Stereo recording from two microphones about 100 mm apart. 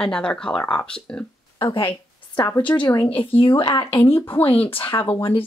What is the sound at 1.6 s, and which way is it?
Speech, 60° left (ahead or behind).